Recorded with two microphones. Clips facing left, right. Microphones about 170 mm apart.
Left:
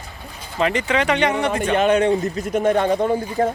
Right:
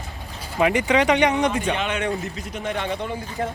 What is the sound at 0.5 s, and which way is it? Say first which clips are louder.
Speech: right 1 dB; 15° right (ahead or behind).